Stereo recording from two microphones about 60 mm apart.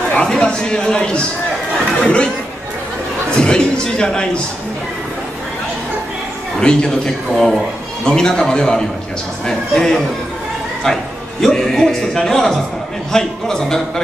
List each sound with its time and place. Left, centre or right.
0.1 s speech: centre
3.3 s speech: centre
6.6 s speech: centre
7.3 s a man's voice: centre
11.4 s a man's voice: centre